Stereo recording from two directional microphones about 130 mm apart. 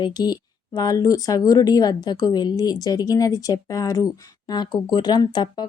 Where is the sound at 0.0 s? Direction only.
35° left (ahead or behind).